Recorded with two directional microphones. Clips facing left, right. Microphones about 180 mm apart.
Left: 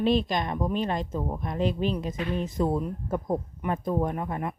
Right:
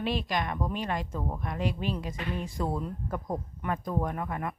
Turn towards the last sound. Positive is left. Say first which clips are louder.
# left 3 dB
turn(degrees=25)  # may be behind; listen again after turning